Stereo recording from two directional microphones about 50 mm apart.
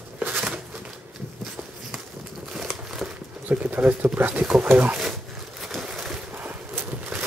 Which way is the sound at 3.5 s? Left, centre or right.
Right.